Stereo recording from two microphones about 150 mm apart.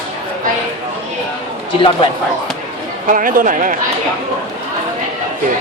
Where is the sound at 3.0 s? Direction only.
65° right (ahead or behind).